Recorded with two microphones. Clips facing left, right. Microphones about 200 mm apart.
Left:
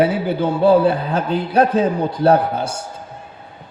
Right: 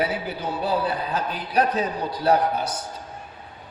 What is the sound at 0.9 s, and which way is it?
Speech, 50° left (ahead or behind).